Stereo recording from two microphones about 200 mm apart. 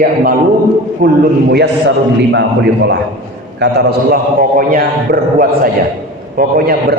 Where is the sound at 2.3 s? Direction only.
55° right (ahead or behind).